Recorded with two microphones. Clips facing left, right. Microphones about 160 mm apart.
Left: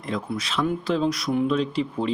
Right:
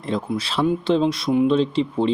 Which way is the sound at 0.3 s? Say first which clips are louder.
Right 4 dB; 30° right (ahead or behind).